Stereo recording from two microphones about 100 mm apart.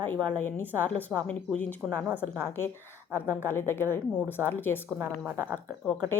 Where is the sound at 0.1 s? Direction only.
20° left (ahead or behind).